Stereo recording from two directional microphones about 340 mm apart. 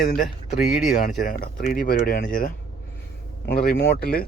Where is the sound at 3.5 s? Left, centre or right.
Left.